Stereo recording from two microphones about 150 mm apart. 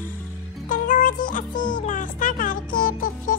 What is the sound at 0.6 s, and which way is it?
Music, 60° left (ahead or behind).